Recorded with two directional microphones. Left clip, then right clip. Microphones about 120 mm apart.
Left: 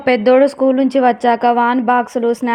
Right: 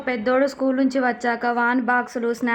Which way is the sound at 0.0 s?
55° left (ahead or behind).